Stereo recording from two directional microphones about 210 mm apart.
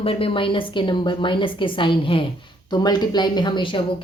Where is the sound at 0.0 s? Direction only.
25° left (ahead or behind).